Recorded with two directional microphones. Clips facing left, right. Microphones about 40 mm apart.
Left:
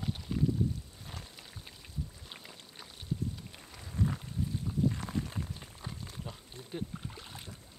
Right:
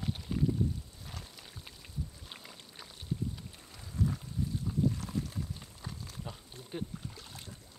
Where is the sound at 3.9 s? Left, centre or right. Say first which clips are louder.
Even; left.